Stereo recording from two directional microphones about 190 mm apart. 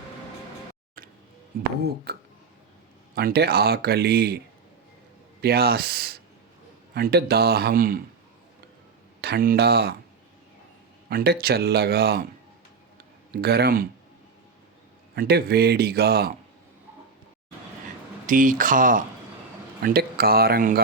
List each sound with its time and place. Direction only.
1.0 s music: 50° right (ahead or behind)
1.8 s speech: 60° right (ahead or behind)
3.2 s speech: 55° right (ahead or behind)
5.4 s speech: 55° right (ahead or behind)
9.2 s speech: 50° right (ahead or behind)
11.1 s speech: 55° right (ahead or behind)
13.4 s speech: 55° right (ahead or behind)
15.1 s speech: 55° right (ahead or behind)
18.3 s speech: 45° right (ahead or behind)